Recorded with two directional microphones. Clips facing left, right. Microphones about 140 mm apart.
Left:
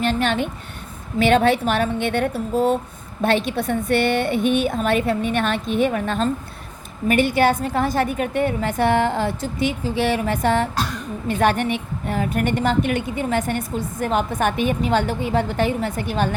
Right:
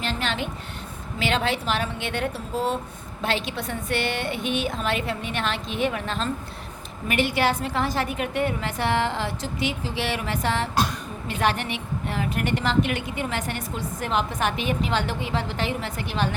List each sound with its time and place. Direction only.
0.0 s a woman's voice: 50° left (ahead or behind)